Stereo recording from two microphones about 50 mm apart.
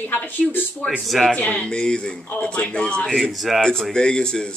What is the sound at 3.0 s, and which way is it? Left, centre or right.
Speech, centre.